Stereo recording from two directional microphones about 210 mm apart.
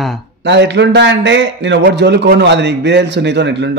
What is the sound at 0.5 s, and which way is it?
A man's voice, 55° right (ahead or behind).